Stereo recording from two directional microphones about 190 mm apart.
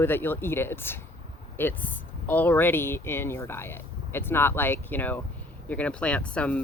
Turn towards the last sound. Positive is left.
turn(degrees=5)  # may be behind; listen again after turning